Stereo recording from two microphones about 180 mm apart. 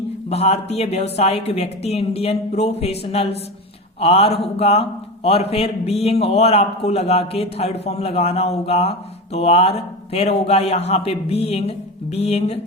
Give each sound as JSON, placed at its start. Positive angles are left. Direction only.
{"t": 0.3, "sound": "a man's voice", "side_deg": 35}